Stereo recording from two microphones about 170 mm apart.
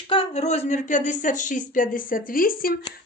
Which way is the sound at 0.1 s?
35° left (ahead or behind).